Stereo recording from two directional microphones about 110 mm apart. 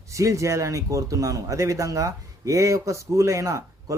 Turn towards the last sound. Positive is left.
turn(degrees=-30)  # may be behind; listen again after turning